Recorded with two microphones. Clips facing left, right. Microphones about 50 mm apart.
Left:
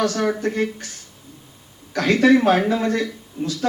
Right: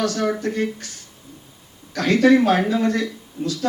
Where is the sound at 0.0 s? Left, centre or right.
Left.